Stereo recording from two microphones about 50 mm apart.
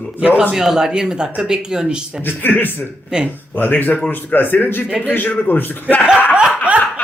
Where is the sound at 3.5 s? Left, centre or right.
Left.